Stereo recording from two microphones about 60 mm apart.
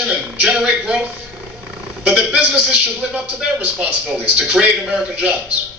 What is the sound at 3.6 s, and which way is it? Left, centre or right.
Speech, centre.